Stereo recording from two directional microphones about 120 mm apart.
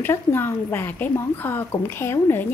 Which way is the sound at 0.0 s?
20° left (ahead or behind).